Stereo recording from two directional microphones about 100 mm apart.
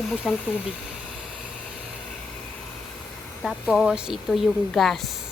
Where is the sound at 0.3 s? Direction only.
5° right (ahead or behind).